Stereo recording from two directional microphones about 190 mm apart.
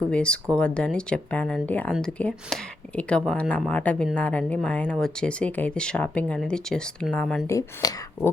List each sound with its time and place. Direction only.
0.1 s speech: 5° left (ahead or behind)
7.4 s speech: 15° left (ahead or behind)